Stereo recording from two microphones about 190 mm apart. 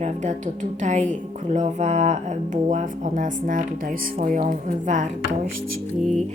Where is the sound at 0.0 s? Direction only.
40° right (ahead or behind).